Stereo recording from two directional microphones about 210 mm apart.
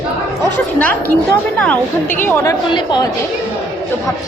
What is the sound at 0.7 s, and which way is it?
Speech, 10° left (ahead or behind).